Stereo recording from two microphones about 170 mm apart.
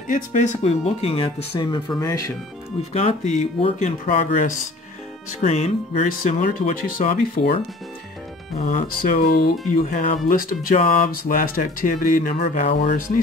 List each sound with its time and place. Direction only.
0.1 s speech: 45° left (ahead or behind); by 2.3 s 20° left (ahead or behind)
2.9 s speech: 45° left (ahead or behind)
8.5 s speech: 55° left (ahead or behind)